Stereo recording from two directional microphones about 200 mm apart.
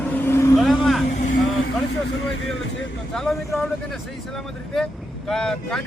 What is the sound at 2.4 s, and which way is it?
Speech, 75° left (ahead or behind).